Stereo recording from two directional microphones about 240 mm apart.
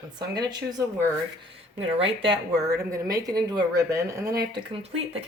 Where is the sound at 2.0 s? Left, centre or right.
Right.